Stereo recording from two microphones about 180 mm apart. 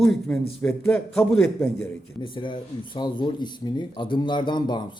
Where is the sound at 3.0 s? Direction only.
25° left (ahead or behind).